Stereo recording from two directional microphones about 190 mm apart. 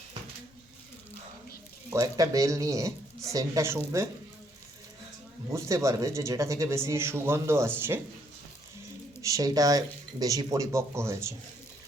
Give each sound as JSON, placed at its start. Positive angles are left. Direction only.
{"t": 1.9, "sound": "speech", "side_deg": -15}
{"t": 5.5, "sound": "speech", "side_deg": -15}
{"t": 9.2, "sound": "speech", "side_deg": -15}